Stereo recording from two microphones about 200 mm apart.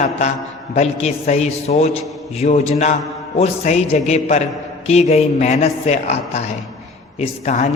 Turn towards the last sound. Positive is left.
turn(degrees=35)  # may be behind; listen again after turning